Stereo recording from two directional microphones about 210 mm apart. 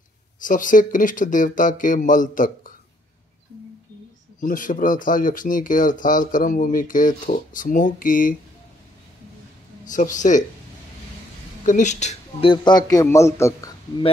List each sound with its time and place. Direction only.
0.4 s speech: 40° left (ahead or behind)
4.4 s speech: 40° left (ahead or behind)
9.8 s speech: 35° left (ahead or behind)
11.6 s a man's voice: 35° left (ahead or behind); by 13.7 s 15° left (ahead or behind)